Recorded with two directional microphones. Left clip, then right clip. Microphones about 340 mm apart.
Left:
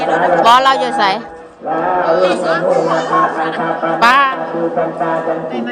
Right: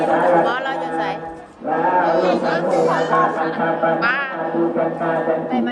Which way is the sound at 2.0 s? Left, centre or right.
Centre.